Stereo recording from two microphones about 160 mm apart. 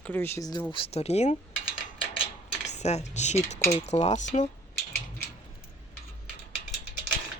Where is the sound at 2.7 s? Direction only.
45° left (ahead or behind).